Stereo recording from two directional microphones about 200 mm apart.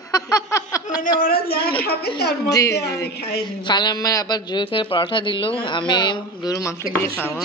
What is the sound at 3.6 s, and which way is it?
A man's voice, 20° left (ahead or behind).